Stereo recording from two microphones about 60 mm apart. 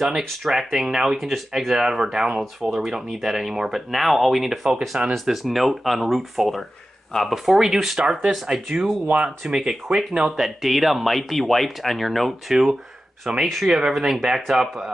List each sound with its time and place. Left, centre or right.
0.4 s speech: centre
7.3 s speech: centre
9.0 s speech: right
9.4 s speech: centre
13.3 s speech: centre